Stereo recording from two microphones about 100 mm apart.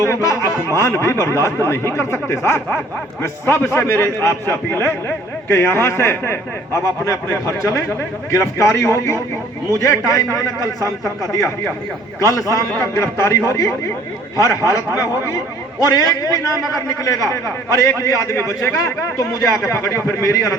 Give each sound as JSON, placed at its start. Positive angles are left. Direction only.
{"t": 0.0, "sound": "a man's voice", "side_deg": 30}